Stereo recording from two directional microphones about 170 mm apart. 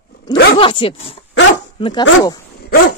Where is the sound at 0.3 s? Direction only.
30° left (ahead or behind).